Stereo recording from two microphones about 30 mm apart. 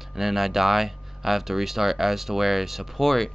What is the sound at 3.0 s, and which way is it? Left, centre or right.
Speech, centre.